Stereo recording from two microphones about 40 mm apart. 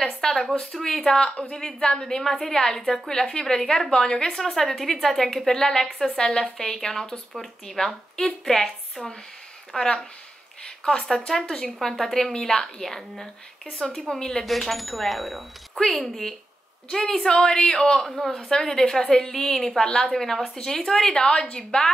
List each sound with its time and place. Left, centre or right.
0.2 s a sound: centre
0.6 s a woman's voice: centre
4.4 s a woman's voice: centre
9.7 s a woman's voice: centre
14.4 s a woman's voice: centre
18.0 s a woman's voice: centre
20.1 s a woman's voice: centre; by 21.6 s left